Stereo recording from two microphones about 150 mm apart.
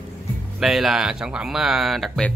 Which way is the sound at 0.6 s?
Centre (ahead or behind).